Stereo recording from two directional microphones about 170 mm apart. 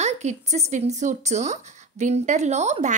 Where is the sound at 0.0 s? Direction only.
40° right (ahead or behind).